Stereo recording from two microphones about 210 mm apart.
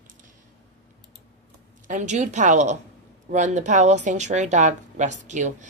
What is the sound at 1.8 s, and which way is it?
Speech, 35° right (ahead or behind).